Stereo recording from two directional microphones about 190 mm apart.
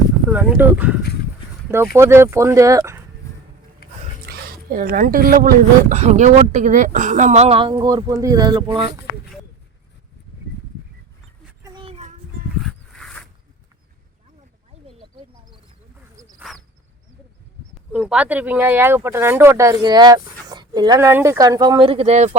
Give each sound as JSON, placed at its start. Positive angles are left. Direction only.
{"t": 0.3, "sound": "speech", "side_deg": -5}
{"t": 2.0, "sound": "speech", "side_deg": -15}
{"t": 4.3, "sound": "speech", "side_deg": -50}
{"t": 5.9, "sound": "speech", "side_deg": -35}
{"t": 11.6, "sound": "child singing", "side_deg": -25}
{"t": 12.9, "sound": "zipper", "side_deg": 5}
{"t": 16.5, "sound": "a sound", "side_deg": 0}
{"t": 17.9, "sound": "speech", "side_deg": -5}